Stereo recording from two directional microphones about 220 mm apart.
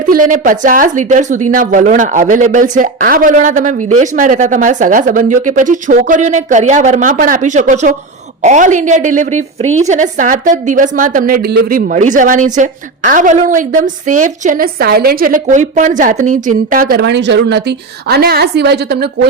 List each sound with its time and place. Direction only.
0.1 s a woman's voice: 35° right (ahead or behind)
16.9 s a woman's voice: 50° right (ahead or behind)